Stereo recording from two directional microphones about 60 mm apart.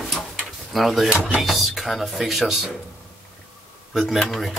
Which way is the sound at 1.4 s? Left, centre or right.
Centre.